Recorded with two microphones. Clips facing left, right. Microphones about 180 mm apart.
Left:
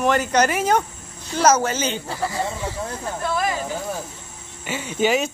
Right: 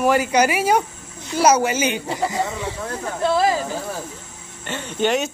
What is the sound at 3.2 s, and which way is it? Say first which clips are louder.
Speech: right 6 dB; 30° right (ahead or behind).